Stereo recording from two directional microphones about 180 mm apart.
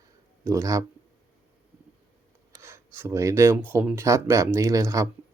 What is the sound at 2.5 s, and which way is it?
Speech, 15° right (ahead or behind).